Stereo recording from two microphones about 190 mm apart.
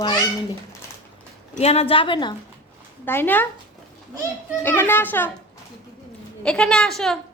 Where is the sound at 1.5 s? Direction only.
35° left (ahead or behind).